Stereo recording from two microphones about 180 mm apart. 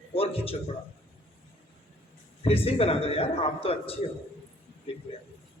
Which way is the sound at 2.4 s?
30° left (ahead or behind).